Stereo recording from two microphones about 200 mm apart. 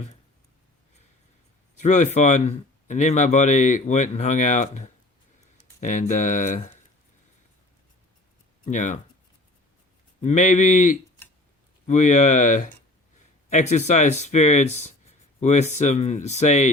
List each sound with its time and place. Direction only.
1.8 s speech: 35° left (ahead or behind)
8.6 s speech: 40° left (ahead or behind)
10.2 s speech: 35° left (ahead or behind)